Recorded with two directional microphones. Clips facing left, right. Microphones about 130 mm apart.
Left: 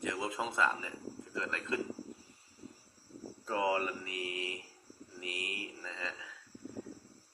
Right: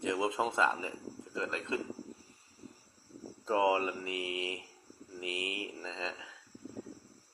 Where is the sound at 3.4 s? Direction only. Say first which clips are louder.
Right 4 dB; 25° right (ahead or behind).